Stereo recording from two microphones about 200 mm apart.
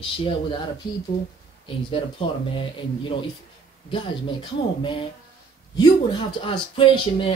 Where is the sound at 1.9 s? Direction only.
25° left (ahead or behind).